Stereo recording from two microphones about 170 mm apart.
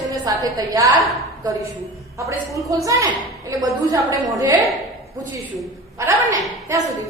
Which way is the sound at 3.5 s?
20° right (ahead or behind).